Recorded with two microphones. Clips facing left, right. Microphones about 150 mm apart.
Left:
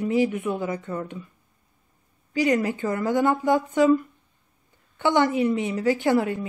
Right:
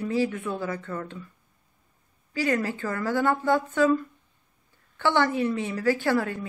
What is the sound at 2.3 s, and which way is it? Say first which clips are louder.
Speech: left 4 dB; 15° left (ahead or behind).